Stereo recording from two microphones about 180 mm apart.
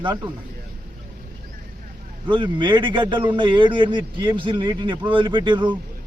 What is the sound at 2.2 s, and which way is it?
A man's voice, 25° right (ahead or behind).